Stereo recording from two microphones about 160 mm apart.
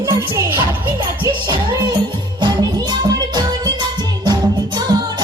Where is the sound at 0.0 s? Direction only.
20° right (ahead or behind).